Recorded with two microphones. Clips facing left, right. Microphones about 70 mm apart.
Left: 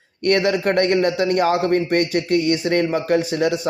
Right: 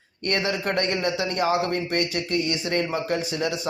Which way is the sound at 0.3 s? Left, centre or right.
Left.